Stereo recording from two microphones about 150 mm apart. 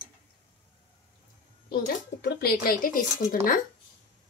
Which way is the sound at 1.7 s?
85° left.